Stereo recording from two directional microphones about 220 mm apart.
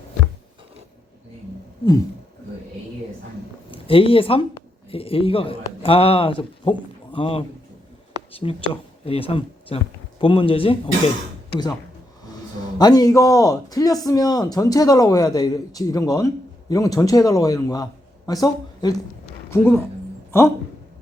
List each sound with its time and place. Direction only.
3.7 s speech: 25° left (ahead or behind)
12.8 s a man's voice: 15° left (ahead or behind)